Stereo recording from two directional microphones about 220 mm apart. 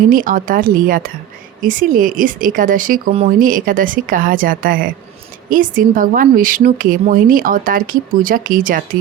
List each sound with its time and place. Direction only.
0.1 s a woman's voice: 40° right (ahead or behind)